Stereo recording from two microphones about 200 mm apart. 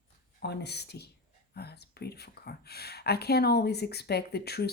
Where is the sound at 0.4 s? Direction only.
55° left (ahead or behind).